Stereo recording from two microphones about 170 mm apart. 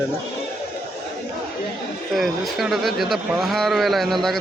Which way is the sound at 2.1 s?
Centre (ahead or behind).